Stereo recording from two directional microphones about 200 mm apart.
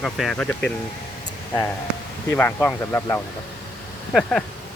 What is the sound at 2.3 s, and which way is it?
Speech, 10° left (ahead or behind).